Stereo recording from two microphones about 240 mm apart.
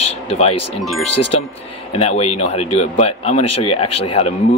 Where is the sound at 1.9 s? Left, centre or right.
Left.